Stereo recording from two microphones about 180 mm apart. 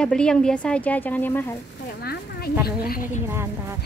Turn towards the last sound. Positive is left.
turn(degrees=-15)  # may be behind; listen again after turning